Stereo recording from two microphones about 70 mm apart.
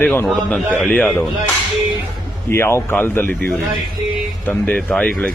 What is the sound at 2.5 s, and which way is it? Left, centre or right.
Speech, left.